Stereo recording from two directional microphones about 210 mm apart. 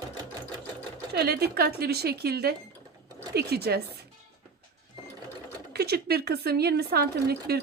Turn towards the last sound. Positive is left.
turn(degrees=-50)  # may be behind; listen again after turning